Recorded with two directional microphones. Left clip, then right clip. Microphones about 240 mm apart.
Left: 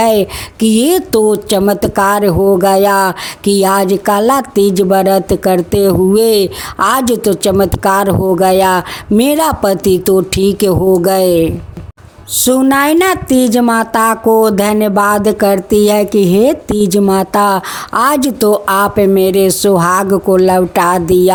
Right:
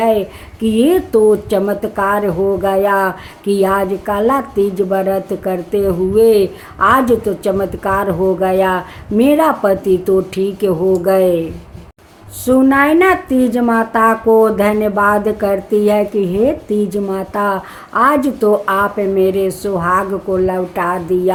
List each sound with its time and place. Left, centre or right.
0.0 s speech: left